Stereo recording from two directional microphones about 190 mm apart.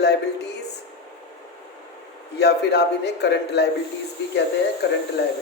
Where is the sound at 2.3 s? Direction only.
60° left (ahead or behind).